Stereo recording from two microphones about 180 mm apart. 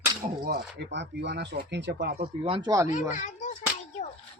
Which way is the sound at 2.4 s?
30° right (ahead or behind).